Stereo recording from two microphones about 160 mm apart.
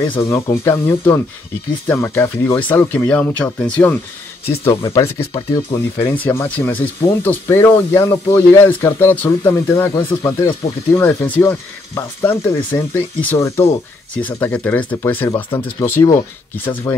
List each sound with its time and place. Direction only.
0.2 s speech: 15° left (ahead or behind)
6.1 s speech: 10° left (ahead or behind)